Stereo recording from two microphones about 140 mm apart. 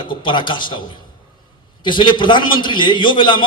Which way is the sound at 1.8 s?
35° left (ahead or behind).